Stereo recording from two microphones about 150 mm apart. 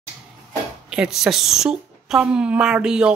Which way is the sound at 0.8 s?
5° right (ahead or behind).